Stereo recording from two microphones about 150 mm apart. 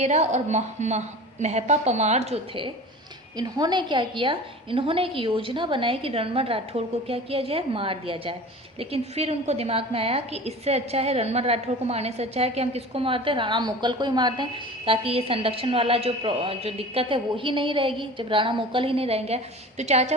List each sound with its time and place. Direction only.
0.0 s a woman's voice: 50° right (ahead or behind)
3.3 s a woman's voice: 25° right (ahead or behind)
14.8 s a woman's voice: 40° right (ahead or behind)